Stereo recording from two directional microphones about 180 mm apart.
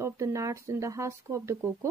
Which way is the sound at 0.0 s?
15° right (ahead or behind).